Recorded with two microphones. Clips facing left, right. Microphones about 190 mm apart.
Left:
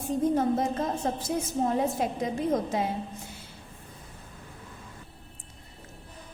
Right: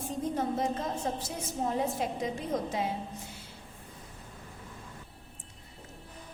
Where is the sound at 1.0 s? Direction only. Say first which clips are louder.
Left 2 dB; 55° left (ahead or behind).